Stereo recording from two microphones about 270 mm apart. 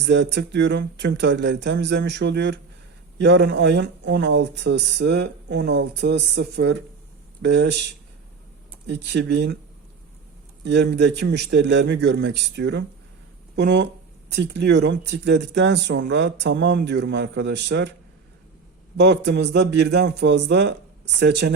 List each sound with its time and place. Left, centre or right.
0.0 s speech: right
8.9 s speech: right
10.6 s speech: right
18.9 s speech: right